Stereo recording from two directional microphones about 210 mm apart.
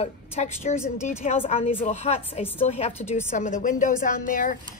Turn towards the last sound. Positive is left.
turn(degrees=40)  # may be behind; listen again after turning